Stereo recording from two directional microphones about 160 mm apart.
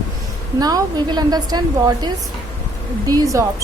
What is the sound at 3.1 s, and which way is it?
Speech, 20° right (ahead or behind).